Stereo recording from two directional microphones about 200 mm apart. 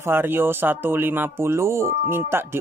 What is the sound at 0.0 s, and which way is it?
Speech, 10° right (ahead or behind).